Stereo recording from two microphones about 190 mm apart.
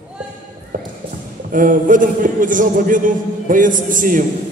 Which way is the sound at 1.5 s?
45° right (ahead or behind).